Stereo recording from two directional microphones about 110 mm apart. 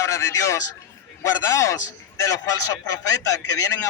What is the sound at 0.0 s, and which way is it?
A man's voice, 30° left (ahead or behind).